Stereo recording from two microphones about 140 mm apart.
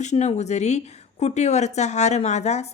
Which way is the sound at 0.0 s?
55° left (ahead or behind).